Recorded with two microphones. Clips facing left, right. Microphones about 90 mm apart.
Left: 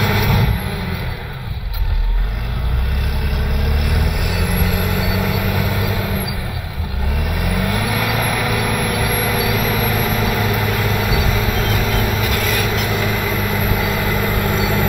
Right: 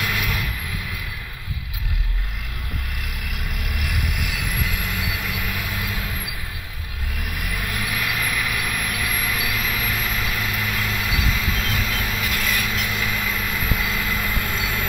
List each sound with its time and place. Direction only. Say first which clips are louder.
0.0 s vehicle: left 8 dB; 45° left (ahead or behind)
3.8 s vehicle: left 6 dB; 40° left (ahead or behind)
7.4 s vehicle: left 8 dB; 55° left (ahead or behind); by 14.9 s 35° left (ahead or behind)